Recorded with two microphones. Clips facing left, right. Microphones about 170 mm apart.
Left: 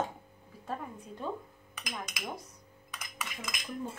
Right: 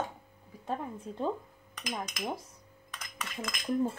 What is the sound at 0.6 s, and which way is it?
Speech, 20° right (ahead or behind).